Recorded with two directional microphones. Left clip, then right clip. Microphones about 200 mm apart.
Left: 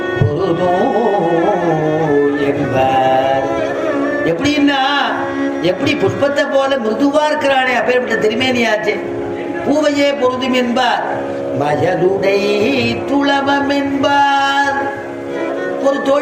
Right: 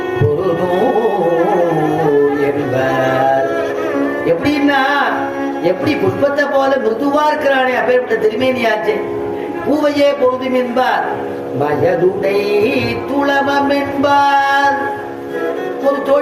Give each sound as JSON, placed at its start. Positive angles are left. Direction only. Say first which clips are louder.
{"t": 7.1, "sound": "music", "louder": "right 1 dB", "side_deg": 30}
{"t": 13.2, "sound": "music", "louder": "right 2 dB", "side_deg": 25}